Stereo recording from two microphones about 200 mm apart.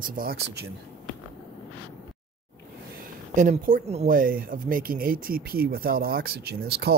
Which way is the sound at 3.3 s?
40° right (ahead or behind).